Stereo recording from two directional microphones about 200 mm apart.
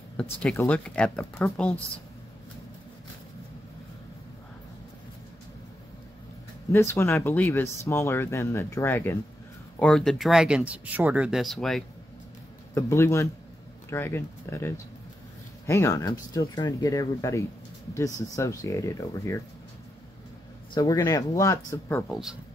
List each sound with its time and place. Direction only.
0.2 s speech: 5° left (ahead or behind)
6.7 s speech: 10° left (ahead or behind)
12.7 s speech: 15° left (ahead or behind)
20.7 s speech: 20° left (ahead or behind)
22.1 s speech: centre (ahead or behind)